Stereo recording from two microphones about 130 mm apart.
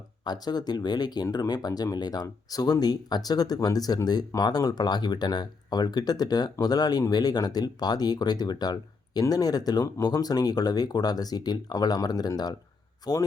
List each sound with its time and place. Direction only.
0.3 s speech: 30° left (ahead or behind)